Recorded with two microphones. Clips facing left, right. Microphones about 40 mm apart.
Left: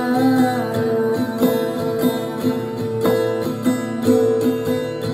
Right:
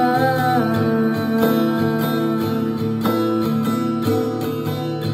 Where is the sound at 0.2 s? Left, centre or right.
Right.